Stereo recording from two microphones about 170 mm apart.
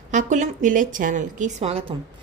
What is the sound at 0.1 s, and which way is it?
A woman's voice, 45° right (ahead or behind).